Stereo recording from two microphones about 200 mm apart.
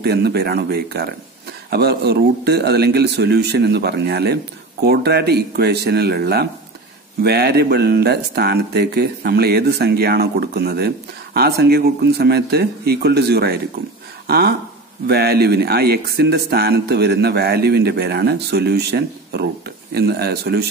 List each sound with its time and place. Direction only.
0.0 s speech: 55° right (ahead or behind)